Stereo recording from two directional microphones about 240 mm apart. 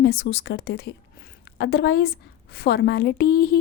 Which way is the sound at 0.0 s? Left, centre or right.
Left.